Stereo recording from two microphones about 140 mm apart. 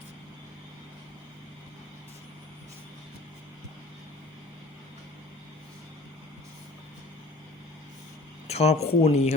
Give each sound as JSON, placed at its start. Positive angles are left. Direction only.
{"t": 8.4, "sound": "speech", "side_deg": 50}